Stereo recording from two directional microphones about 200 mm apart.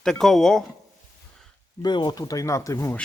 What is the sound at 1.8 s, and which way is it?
Speech, 20° left (ahead or behind).